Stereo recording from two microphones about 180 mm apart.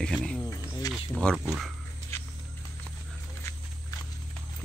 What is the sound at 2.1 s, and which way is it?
Walk, 15° left (ahead or behind).